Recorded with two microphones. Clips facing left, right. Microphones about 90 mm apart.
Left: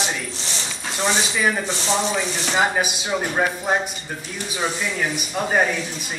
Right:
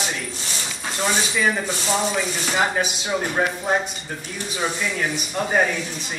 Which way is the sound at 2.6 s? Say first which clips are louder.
Left 1 dB; 5° left (ahead or behind).